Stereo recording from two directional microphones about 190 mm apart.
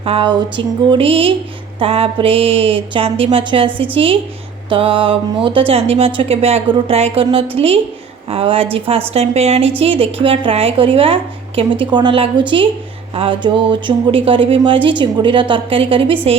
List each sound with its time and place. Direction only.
0.0 s speech: 30° right (ahead or behind)